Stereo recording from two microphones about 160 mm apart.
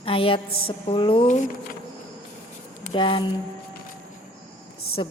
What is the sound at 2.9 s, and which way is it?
Speech, 30° left (ahead or behind).